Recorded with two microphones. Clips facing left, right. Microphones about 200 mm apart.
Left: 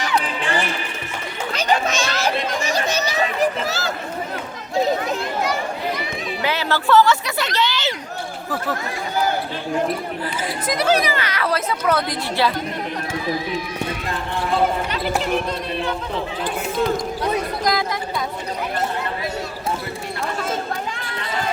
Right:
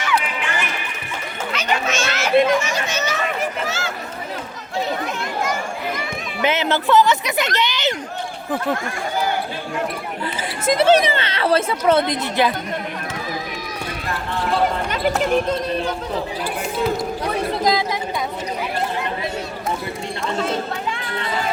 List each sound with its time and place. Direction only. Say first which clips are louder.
0.0 s run: even; 35° left (ahead or behind)
1.5 s chatter: left 2 dB; 35° left (ahead or behind)
6.4 s speech: right 3 dB; 20° right (ahead or behind)
10.7 s a woman's voice: right 5 dB; 25° right (ahead or behind)
17.6 s a woman's voice: right 5 dB; 20° right (ahead or behind)